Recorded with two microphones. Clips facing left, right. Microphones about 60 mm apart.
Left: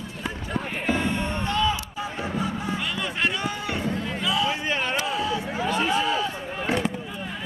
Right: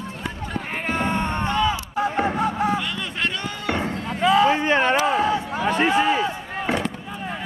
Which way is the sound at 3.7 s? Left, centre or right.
Right.